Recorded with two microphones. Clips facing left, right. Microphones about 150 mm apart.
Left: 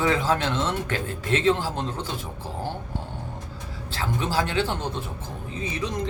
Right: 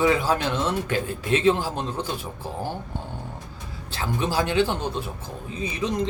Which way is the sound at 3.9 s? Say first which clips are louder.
Right 1 dB; 15° right (ahead or behind).